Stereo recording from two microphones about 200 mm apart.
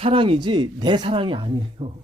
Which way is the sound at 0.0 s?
25° right (ahead or behind).